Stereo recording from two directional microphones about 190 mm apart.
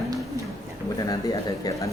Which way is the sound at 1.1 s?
15° left (ahead or behind).